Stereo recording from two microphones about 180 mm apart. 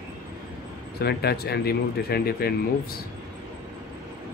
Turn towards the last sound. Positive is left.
turn(degrees=60)  # may be behind; listen again after turning